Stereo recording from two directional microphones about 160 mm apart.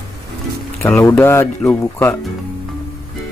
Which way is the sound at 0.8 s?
15° left (ahead or behind).